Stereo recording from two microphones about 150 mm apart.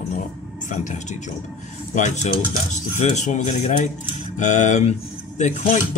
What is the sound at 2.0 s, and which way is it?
Speech, 55° left (ahead or behind).